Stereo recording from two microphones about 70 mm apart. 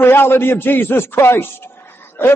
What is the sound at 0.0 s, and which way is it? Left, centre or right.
A man's voice, left.